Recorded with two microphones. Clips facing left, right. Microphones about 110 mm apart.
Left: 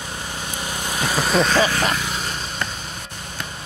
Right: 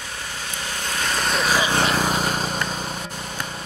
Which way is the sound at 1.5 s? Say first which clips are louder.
Left 2 dB; 15° right (ahead or behind).